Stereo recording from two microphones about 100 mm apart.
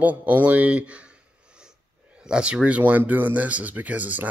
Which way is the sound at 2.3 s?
10° right (ahead or behind).